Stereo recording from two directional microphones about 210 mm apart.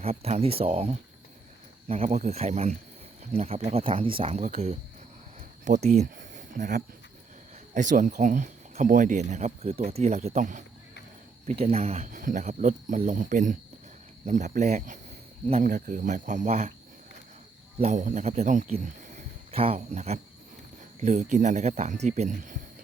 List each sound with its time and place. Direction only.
0.0 s speech: 30° right (ahead or behind)
17.7 s speech: 35° right (ahead or behind)